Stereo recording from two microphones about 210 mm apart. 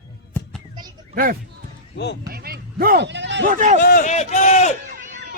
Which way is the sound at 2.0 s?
55° left (ahead or behind).